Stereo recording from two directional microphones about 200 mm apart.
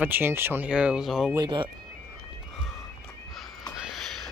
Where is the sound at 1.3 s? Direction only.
20° right (ahead or behind).